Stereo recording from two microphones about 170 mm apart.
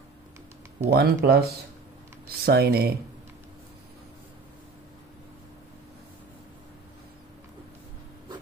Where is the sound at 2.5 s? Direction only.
65° right (ahead or behind).